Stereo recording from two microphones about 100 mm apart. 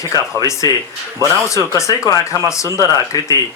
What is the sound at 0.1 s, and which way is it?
Speech, 35° left (ahead or behind).